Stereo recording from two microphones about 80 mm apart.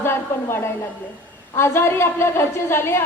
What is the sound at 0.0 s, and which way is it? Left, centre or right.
A woman's voice, left.